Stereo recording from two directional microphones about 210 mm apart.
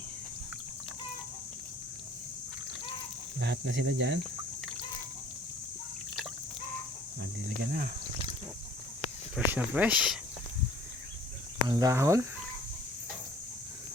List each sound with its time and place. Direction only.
3.4 s speech: 55° right (ahead or behind)
7.2 s speech: 55° right (ahead or behind)
9.3 s speech: 5° right (ahead or behind)
11.7 s speech: 15° right (ahead or behind)